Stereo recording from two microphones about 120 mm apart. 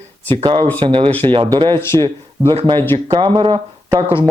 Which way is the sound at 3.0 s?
45° right (ahead or behind).